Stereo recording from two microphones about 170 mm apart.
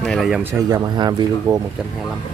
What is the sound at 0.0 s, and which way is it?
Speech, centre (ahead or behind).